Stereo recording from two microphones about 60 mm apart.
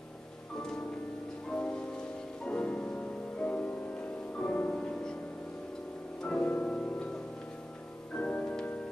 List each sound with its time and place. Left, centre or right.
0.6 s music: centre
6.2 s music: left
8.1 s keyboard: left